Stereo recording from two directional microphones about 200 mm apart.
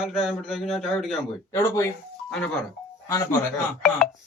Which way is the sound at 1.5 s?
15° left (ahead or behind).